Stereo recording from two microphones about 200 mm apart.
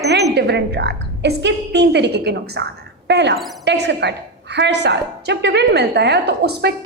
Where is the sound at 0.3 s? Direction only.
55° right (ahead or behind).